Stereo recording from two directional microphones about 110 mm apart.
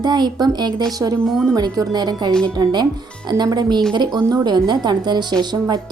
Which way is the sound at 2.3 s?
5° left (ahead or behind).